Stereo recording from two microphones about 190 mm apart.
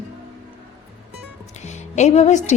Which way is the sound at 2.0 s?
35° left (ahead or behind).